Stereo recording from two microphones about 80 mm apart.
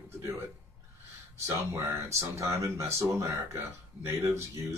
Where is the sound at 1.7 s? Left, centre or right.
Right.